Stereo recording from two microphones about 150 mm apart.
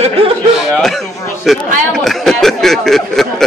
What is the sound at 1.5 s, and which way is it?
Speech, centre (ahead or behind).